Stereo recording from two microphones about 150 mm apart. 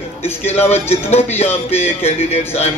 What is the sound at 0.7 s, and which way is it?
Speech, 15° left (ahead or behind).